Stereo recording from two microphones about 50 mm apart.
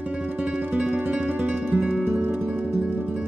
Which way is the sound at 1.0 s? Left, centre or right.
Right.